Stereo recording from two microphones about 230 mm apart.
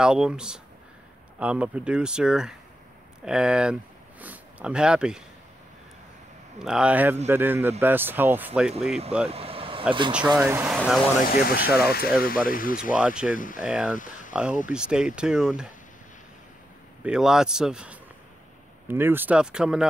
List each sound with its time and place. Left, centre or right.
0.0 s speech: centre
6.6 s speech: centre
9.3 s vehicle: right
10.2 s speech: centre
11.2 s speech: left
12.9 s speech: centre
13.3 s speech: left
13.6 s speech: centre
13.9 s speech: left
14.3 s speech: centre
17.0 s speech: centre